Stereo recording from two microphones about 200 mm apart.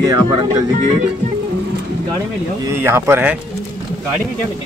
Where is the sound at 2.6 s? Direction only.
15° right (ahead or behind).